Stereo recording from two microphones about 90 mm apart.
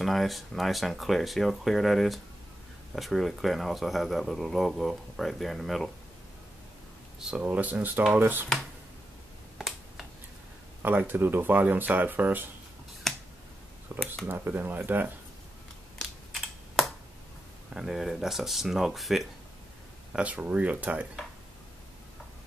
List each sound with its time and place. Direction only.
0.0 s speech: centre (ahead or behind)
7.2 s speech: 10° right (ahead or behind)
9.6 s finger snapping: 5° right (ahead or behind)
10.8 s speech: 20° right (ahead or behind)
13.0 s finger snapping: centre (ahead or behind)
13.9 s a sound: 30° right (ahead or behind)
14.2 s speech: 25° right (ahead or behind)
16.0 s computer keyboard: centre (ahead or behind)
17.7 s speech: 5° right (ahead or behind)
20.1 s speech: 15° right (ahead or behind)